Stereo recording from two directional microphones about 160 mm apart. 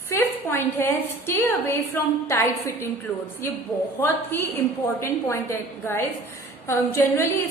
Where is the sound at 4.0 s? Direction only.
15° left (ahead or behind).